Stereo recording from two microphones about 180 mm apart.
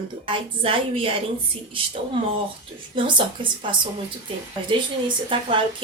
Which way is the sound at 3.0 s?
30° right (ahead or behind).